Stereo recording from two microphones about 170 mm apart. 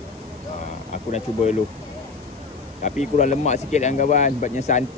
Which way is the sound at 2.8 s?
45° left (ahead or behind).